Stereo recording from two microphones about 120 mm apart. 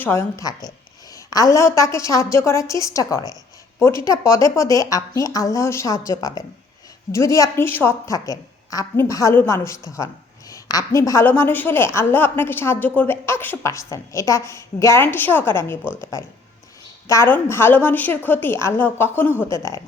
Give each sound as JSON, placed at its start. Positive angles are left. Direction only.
{"t": 0.0, "sound": "a woman's voice", "side_deg": 20}
{"t": 1.1, "sound": "a sound", "side_deg": 30}
{"t": 1.5, "sound": "a woman's voice", "side_deg": 25}
{"t": 17.1, "sound": "a woman's voice", "side_deg": 25}